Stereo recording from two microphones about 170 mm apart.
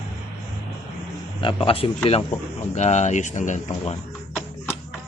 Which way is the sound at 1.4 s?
30° left (ahead or behind).